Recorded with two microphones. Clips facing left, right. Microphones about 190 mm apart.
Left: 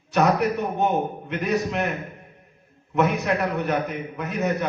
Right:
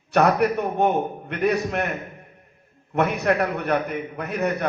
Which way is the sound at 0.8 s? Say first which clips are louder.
Right 2 dB; 55° right (ahead or behind).